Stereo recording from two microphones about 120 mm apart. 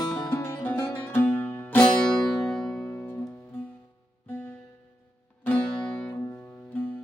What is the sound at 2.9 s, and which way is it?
Music, 20° left (ahead or behind).